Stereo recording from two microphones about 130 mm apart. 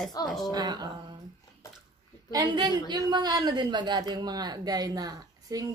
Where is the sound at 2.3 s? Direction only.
35° right (ahead or behind).